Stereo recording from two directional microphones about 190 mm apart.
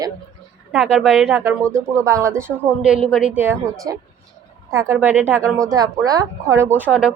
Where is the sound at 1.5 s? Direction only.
15° right (ahead or behind).